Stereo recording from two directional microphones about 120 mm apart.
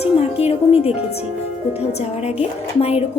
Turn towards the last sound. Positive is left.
turn(degrees=60)  # may be behind; listen again after turning